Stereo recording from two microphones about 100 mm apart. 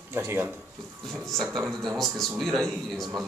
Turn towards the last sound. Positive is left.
turn(degrees=0)  # may be behind; listen again after turning